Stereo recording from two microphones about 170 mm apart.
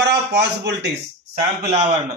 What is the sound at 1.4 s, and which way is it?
Speech, 40° right (ahead or behind).